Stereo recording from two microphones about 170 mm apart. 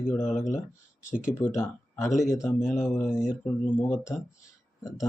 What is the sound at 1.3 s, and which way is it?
Speech, 15° left (ahead or behind).